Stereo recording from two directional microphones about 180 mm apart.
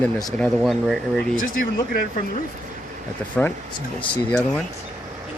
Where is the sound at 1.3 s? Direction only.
50° left (ahead or behind).